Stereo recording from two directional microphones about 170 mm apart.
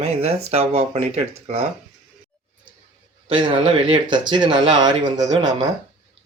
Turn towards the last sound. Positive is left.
turn(degrees=-25)  # may be behind; listen again after turning